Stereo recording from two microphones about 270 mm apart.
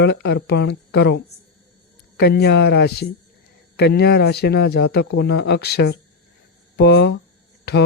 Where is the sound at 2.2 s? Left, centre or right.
Left.